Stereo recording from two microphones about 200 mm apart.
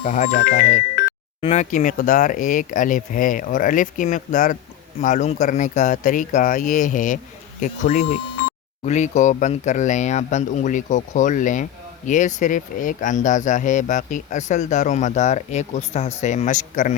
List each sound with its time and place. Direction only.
0.0 s speech: 40° left (ahead or behind)